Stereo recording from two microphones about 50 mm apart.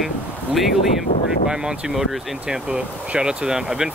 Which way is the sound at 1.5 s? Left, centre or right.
Centre.